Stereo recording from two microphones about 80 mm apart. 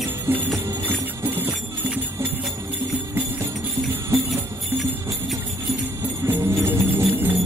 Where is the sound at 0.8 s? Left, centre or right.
Right.